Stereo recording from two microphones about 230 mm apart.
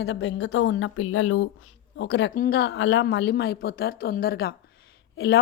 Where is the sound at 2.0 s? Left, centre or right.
Left.